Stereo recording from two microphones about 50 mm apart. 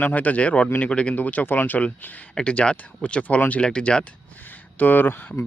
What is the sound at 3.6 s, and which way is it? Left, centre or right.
Speech, centre.